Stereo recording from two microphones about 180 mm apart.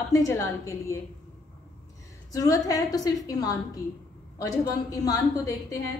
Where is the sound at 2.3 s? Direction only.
20° left (ahead or behind).